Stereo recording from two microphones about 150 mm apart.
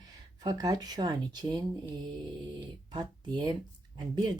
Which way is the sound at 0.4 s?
25° right (ahead or behind).